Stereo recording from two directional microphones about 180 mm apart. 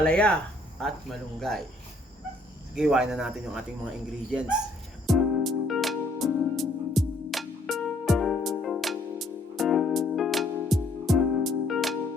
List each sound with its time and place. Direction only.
0.0 s speech: 5° left (ahead or behind)
2.7 s speech: 5° right (ahead or behind)
5.0 s music: centre (ahead or behind)